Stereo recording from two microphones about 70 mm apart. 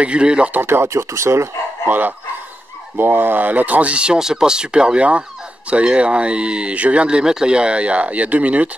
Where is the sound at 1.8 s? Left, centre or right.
Right.